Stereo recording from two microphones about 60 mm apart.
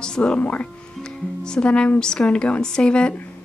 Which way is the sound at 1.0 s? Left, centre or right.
Centre.